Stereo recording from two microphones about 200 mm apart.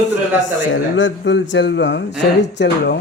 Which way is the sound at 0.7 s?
70° left (ahead or behind).